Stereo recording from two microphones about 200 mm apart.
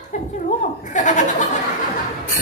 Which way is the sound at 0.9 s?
40° left (ahead or behind).